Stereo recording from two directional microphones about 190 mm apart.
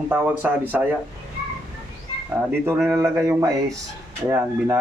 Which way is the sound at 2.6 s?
10° right (ahead or behind).